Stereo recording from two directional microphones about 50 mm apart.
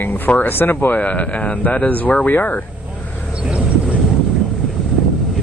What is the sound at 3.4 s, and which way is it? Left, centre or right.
Vehicle, right.